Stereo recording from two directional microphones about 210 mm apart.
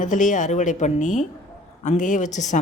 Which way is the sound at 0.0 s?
35° left (ahead or behind).